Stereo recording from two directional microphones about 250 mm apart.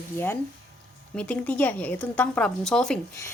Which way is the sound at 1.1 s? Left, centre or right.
Centre.